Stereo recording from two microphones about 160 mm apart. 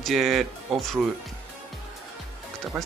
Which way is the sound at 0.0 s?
Centre (ahead or behind).